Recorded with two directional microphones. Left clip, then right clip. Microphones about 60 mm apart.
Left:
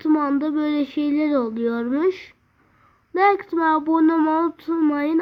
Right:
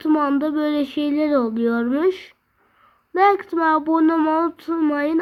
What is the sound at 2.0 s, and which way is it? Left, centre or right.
Speech, right.